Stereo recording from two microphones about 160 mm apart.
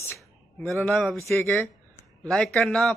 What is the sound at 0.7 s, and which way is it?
Speech, 5° left (ahead or behind).